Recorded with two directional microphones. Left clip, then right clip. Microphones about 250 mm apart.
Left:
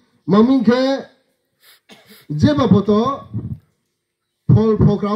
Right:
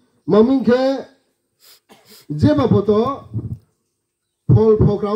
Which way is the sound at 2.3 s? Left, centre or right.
Left.